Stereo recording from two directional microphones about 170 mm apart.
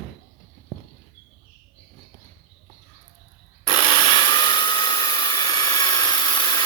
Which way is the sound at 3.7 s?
25° left (ahead or behind).